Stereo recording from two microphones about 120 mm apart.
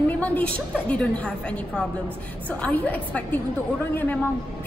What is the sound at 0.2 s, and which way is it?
A woman's voice, 10° left (ahead or behind).